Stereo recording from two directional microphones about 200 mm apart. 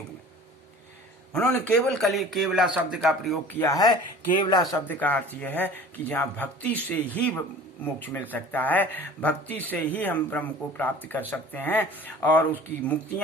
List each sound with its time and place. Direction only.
1.3 s a man's voice: 5° left (ahead or behind)
3.6 s speech: 15° left (ahead or behind)